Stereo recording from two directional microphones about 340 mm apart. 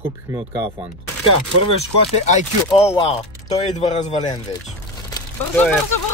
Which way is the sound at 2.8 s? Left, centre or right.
Centre.